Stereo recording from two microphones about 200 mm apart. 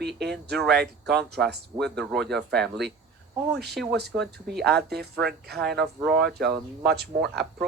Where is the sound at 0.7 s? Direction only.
55° right (ahead or behind).